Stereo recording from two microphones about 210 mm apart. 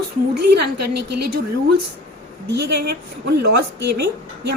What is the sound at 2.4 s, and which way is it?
A woman's voice, 50° right (ahead or behind).